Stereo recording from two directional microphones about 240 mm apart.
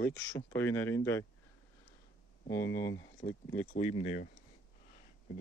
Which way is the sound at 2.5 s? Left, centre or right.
Centre.